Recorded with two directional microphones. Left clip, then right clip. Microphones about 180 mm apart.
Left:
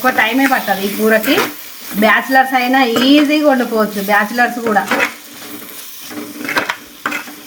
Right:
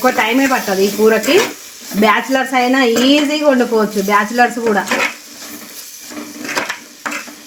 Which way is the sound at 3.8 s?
45° right (ahead or behind).